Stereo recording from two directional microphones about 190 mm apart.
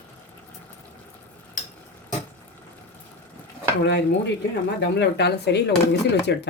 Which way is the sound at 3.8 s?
65° left (ahead or behind).